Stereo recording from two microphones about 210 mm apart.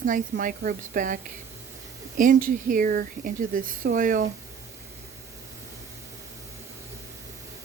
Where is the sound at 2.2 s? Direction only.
40° right (ahead or behind).